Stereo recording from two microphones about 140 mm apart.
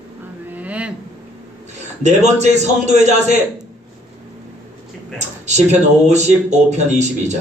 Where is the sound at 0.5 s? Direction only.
10° right (ahead or behind).